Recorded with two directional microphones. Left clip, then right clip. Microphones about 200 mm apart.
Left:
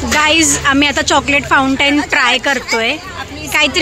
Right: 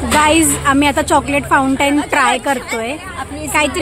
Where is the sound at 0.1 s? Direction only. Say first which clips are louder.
Left 1 dB; 5° right (ahead or behind).